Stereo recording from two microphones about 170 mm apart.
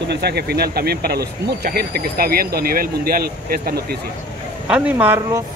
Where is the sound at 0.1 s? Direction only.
70° right (ahead or behind).